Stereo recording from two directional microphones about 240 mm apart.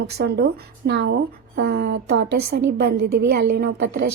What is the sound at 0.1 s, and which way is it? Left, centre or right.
A woman's voice, right.